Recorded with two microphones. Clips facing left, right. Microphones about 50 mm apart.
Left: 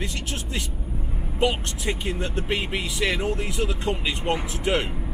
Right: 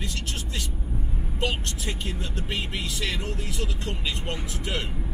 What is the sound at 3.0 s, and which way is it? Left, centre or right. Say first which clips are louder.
Speech: left 10 dB; left.